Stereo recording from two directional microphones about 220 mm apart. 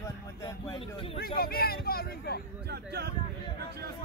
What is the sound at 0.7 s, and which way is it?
Speech, 25° left (ahead or behind).